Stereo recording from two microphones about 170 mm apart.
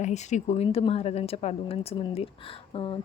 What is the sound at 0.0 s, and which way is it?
Speech, 45° left (ahead or behind).